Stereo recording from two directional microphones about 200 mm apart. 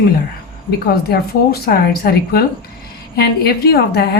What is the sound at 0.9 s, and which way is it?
A woman's voice, 50° left (ahead or behind).